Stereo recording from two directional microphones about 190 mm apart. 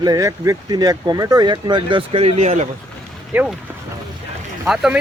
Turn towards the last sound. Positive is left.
turn(degrees=-5)  # may be behind; listen again after turning